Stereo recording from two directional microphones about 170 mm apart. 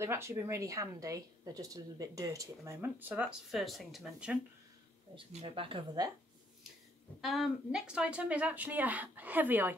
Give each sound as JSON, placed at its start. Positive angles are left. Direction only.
{"t": 0.0, "sound": "a woman's voice", "side_deg": -15}
{"t": 5.1, "sound": "speech", "side_deg": -35}
{"t": 7.2, "sound": "a woman's voice", "side_deg": 0}